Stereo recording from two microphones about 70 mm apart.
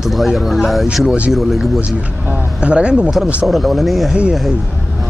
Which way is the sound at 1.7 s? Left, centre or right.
Centre.